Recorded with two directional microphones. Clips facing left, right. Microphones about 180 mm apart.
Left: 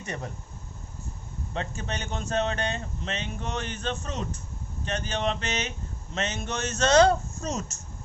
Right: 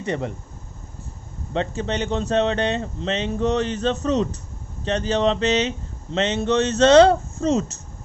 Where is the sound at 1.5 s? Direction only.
30° right (ahead or behind).